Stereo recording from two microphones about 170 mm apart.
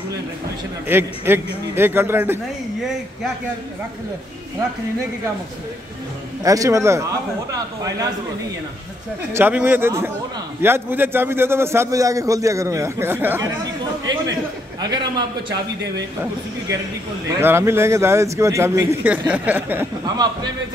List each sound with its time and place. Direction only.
0.8 s a man's voice: 10° right (ahead or behind)
6.4 s speech: 20° right (ahead or behind)
9.3 s a man's voice: 10° right (ahead or behind)
14.8 s a man's voice: 25° right (ahead or behind)
17.4 s a man's voice: 15° right (ahead or behind)